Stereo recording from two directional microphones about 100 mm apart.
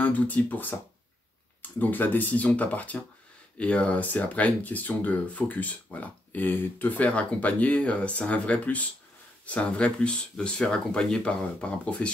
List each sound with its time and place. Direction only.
0.0 s speech: 15° left (ahead or behind)